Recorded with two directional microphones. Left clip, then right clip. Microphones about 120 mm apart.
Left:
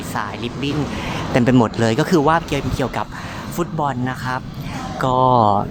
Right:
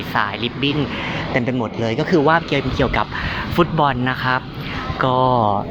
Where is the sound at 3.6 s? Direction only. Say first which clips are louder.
Right 5 dB; 15° right (ahead or behind).